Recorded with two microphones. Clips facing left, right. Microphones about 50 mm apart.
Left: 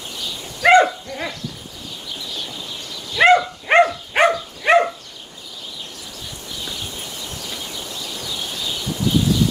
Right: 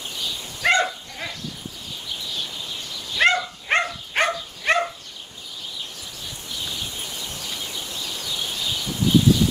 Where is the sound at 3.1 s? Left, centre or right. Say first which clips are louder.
Left 6 dB; left.